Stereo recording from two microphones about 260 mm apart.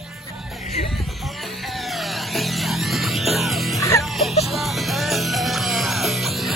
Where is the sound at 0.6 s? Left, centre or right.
Left.